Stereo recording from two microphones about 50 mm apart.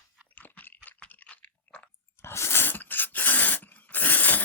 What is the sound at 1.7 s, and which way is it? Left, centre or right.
Chewing, left.